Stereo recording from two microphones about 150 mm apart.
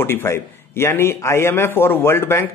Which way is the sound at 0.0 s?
15° left (ahead or behind).